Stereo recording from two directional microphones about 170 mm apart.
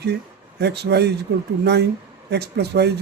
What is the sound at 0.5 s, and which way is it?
Speech, 75° right (ahead or behind).